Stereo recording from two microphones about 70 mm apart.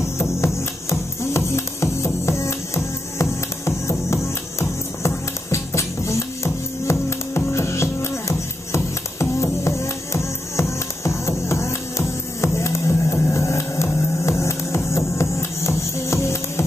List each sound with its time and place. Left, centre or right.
0.2 s music: left